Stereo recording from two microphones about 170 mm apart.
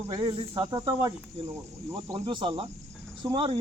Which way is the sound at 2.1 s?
30° right (ahead or behind).